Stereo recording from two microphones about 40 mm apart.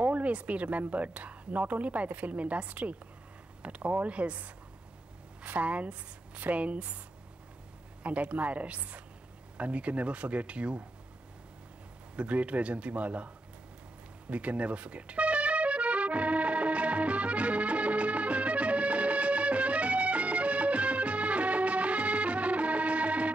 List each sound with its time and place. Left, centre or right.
0.0 s speech: right
8.0 s speech: right
12.2 s speech: right
14.3 s music: right